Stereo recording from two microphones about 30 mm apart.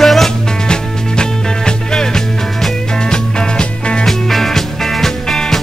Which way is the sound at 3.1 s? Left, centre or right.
Left.